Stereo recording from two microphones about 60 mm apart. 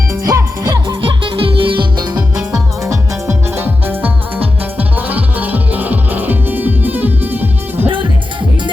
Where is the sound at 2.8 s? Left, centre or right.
Right.